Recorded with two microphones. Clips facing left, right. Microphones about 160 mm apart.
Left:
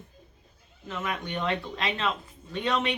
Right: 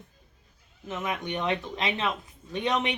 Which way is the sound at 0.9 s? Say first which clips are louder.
Right 1 dB; 15° right (ahead or behind).